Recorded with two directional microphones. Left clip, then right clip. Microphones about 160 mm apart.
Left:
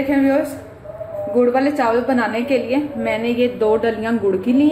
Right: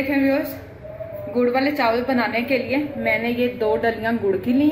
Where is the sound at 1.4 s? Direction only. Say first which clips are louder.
Left 1 dB; 65° left (ahead or behind).